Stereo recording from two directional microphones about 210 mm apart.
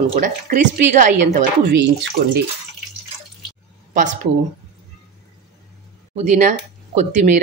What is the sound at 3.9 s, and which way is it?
Speech, 35° right (ahead or behind).